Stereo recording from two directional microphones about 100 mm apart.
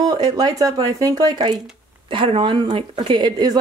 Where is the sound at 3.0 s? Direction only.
45° right (ahead or behind).